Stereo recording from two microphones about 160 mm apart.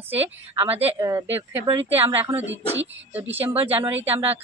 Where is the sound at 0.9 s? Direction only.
20° right (ahead or behind).